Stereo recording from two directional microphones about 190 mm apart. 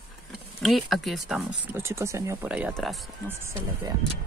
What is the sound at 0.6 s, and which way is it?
Speech, centre (ahead or behind).